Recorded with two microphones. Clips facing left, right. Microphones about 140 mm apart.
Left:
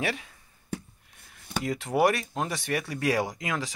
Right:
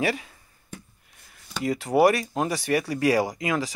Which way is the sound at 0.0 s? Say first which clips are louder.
Right 5 dB; centre (ahead or behind).